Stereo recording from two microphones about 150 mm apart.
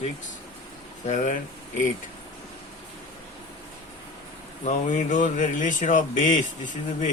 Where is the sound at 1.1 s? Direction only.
55° left (ahead or behind).